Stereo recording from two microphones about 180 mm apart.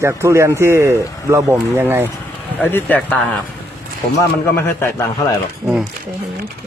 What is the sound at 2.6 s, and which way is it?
Speech, 10° left (ahead or behind).